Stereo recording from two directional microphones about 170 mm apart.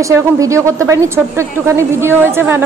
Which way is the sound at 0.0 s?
15° right (ahead or behind).